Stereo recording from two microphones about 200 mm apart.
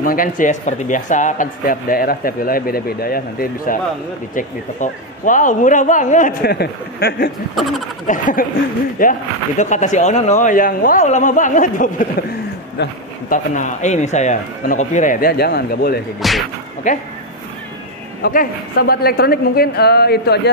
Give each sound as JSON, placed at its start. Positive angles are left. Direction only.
{"t": 0.0, "sound": "speech", "side_deg": 45}
{"t": 13.3, "sound": "speech", "side_deg": 40}
{"t": 16.2, "sound": "speech", "side_deg": 0}
{"t": 16.8, "sound": "speech", "side_deg": 40}
{"t": 18.2, "sound": "speech", "side_deg": 45}